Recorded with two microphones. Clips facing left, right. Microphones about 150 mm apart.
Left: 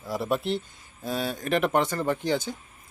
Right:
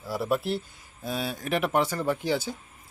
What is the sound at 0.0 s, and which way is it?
Speech, centre (ahead or behind).